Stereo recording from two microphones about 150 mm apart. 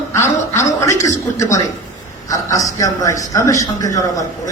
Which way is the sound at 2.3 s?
25° left (ahead or behind).